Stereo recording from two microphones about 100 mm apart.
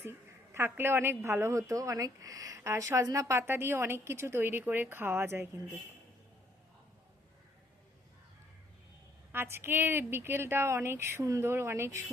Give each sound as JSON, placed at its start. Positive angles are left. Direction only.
{"t": 0.0, "sound": "a woman's voice", "side_deg": -25}
{"t": 9.3, "sound": "speech", "side_deg": -20}